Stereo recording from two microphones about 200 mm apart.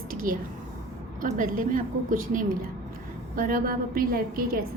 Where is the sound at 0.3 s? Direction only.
45° right (ahead or behind).